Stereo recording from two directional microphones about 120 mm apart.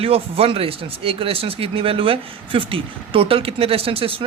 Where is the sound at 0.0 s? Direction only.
55° right (ahead or behind).